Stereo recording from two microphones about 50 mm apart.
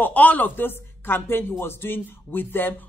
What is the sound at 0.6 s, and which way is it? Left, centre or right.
A woman's voice, left.